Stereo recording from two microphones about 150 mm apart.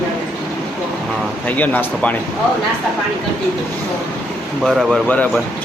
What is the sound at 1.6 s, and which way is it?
Speech, 10° left (ahead or behind).